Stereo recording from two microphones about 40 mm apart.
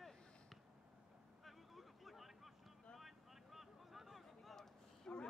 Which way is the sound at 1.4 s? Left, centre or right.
Centre.